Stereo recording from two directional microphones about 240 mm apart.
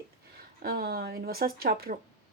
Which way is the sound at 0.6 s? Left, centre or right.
Right.